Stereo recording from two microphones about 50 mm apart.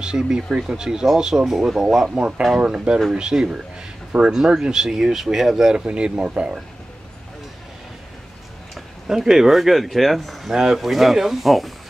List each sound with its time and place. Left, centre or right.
0.0 s speech: centre
2.6 s speech: centre
5.9 s speech: right
9.0 s speech: centre
10.5 s speech: centre
10.8 s speech: centre